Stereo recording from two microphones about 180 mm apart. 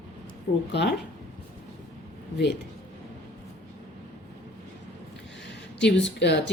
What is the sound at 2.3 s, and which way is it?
Speech, 75° left (ahead or behind).